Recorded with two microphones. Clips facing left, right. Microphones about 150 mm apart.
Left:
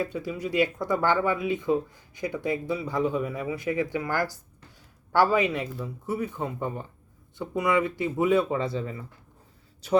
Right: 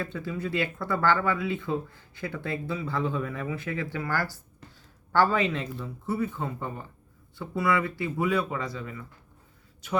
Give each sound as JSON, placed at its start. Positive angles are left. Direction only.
{"t": 0.0, "sound": "speech", "side_deg": 10}